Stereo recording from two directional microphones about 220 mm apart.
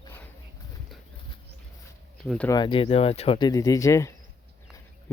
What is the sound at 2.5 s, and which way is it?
Speech, 20° left (ahead or behind).